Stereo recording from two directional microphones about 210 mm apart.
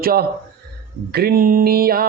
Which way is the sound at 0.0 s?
45° right (ahead or behind).